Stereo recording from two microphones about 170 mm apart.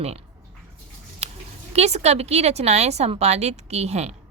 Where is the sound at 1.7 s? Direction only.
40° right (ahead or behind).